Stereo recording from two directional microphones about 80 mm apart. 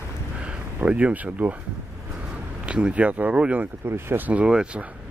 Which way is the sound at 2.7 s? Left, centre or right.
Centre.